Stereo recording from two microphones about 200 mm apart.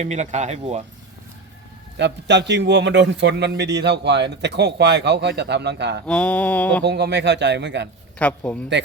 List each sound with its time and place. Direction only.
0.0 s speech: 35° right (ahead or behind)
2.0 s a man's voice: 60° right (ahead or behind)
6.1 s mantra: 5° left (ahead or behind)
6.8 s a man's voice: 55° right (ahead or behind)
8.2 s mantra: 5° left (ahead or behind)